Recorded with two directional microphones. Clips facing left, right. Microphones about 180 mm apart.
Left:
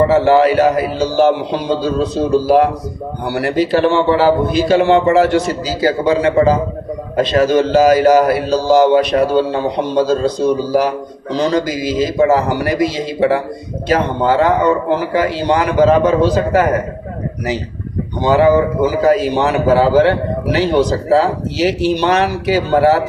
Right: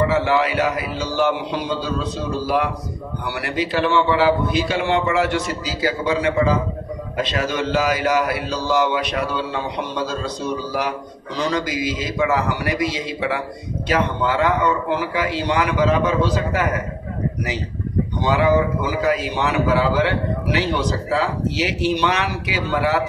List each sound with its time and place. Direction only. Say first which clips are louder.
0.0 s a man's voice: left 8 dB; 40° left (ahead or behind)
18.2 s a man's voice: left 7 dB; 35° left (ahead or behind)